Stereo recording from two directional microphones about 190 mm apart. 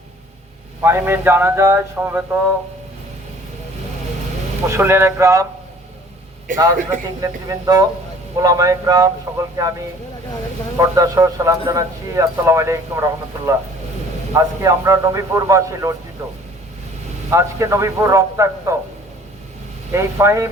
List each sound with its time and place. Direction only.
0.8 s a man's voice: 10° right (ahead or behind)
4.7 s a man's voice: 15° right (ahead or behind)
7.2 s speech: 20° right (ahead or behind)
10.8 s a man's voice: 15° right (ahead or behind)
17.3 s a man's voice: 15° right (ahead or behind)
19.9 s a man's voice: 15° right (ahead or behind)